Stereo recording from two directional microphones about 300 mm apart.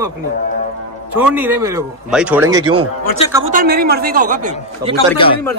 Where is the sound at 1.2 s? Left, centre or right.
Centre.